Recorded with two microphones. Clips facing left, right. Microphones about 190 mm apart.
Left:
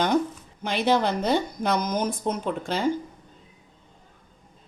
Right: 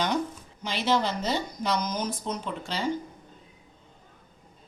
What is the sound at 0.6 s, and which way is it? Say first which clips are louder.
Speech: left 4 dB; 55° left (ahead or behind).